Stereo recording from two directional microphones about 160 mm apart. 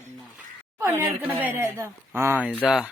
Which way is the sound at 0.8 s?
15° right (ahead or behind).